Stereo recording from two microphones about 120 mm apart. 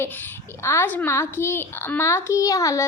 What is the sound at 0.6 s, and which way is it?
A child's voice, 20° left (ahead or behind).